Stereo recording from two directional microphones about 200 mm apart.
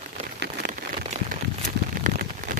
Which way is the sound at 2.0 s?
40° right (ahead or behind).